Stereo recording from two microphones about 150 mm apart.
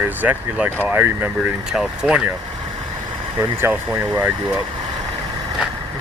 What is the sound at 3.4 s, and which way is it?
Speech, 15° right (ahead or behind).